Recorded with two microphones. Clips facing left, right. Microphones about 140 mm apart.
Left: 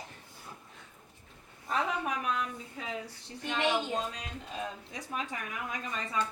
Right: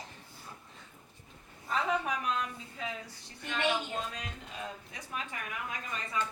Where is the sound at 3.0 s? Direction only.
30° left (ahead or behind).